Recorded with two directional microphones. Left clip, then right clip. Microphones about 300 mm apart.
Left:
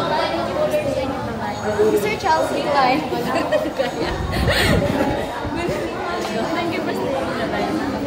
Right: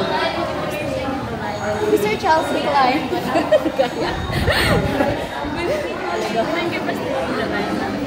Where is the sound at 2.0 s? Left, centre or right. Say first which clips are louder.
Right 1 dB; centre.